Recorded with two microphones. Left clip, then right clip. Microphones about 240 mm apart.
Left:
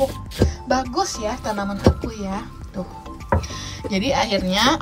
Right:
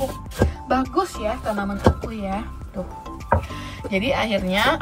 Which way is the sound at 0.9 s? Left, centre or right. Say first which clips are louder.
Even; centre.